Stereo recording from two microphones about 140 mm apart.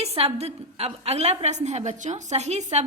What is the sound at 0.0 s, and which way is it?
A woman's voice, 45° right (ahead or behind).